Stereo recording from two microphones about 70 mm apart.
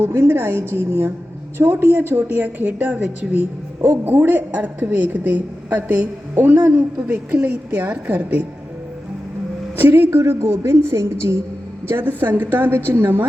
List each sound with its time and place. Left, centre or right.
0.0 s a woman's voice: right
9.7 s a woman's voice: right
11.9 s a woman's voice: right